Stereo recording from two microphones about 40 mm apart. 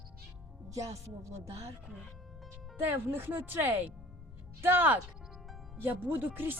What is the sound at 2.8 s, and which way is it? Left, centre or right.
Speech, right.